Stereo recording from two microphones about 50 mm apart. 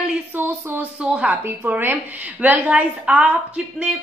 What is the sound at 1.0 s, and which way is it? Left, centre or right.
Speech, right.